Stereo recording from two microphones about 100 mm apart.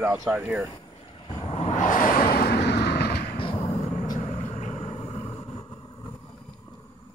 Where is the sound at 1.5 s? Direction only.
80° left.